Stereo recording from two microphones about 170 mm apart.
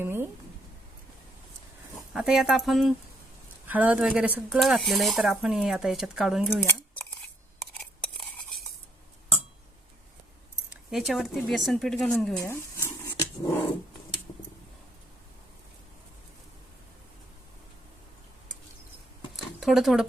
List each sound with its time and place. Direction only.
0.0 s a sound: 15° right (ahead or behind)
2.1 s speech: 5° right (ahead or behind)
7.7 s a sound: 5° left (ahead or behind)
10.9 s speech: centre (ahead or behind)
12.4 s dog: 15° left (ahead or behind)
19.5 s speech: centre (ahead or behind)